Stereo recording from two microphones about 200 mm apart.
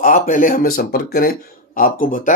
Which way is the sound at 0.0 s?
40° left (ahead or behind).